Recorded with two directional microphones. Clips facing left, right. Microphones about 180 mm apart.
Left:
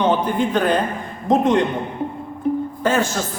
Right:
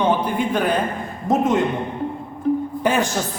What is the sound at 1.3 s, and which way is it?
Speech, 5° right (ahead or behind).